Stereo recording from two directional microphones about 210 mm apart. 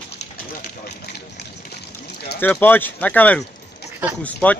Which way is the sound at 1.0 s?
50° left (ahead or behind).